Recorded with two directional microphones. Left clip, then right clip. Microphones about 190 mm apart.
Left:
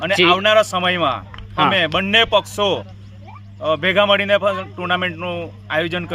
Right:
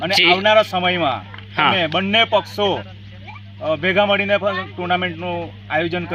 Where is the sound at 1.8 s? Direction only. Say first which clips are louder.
Left 1 dB; 35° left (ahead or behind).